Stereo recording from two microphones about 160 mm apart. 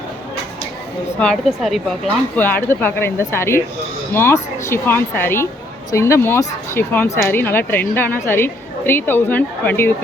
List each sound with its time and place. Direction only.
1.2 s a woman's voice: 5° left (ahead or behind)